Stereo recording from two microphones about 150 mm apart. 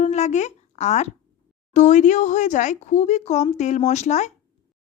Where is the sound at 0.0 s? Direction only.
50° left (ahead or behind).